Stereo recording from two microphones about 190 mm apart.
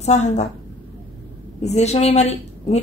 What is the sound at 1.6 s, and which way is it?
A woman's voice, 35° left (ahead or behind).